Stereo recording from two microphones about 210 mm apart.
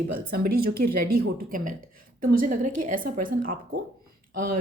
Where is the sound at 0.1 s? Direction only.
45° right (ahead or behind).